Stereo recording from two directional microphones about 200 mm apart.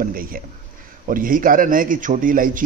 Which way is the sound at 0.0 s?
45° right (ahead or behind).